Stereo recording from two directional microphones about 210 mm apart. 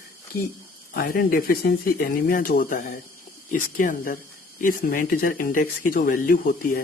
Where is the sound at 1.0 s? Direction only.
45° left (ahead or behind).